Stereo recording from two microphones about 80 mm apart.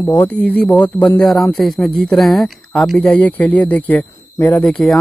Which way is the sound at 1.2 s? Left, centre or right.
Centre.